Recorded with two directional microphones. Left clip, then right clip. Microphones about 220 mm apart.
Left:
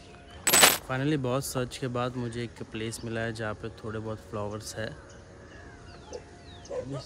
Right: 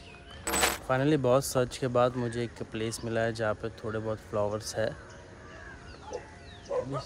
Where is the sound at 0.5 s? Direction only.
Centre (ahead or behind).